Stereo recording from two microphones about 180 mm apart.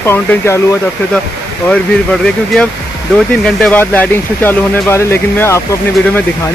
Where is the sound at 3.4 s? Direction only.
5° left (ahead or behind).